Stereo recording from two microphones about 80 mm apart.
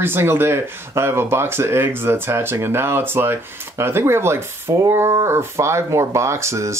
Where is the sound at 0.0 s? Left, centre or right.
Right.